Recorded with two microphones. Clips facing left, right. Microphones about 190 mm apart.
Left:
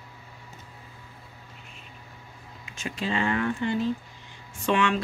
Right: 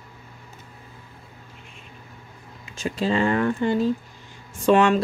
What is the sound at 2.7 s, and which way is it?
Speech, 35° right (ahead or behind).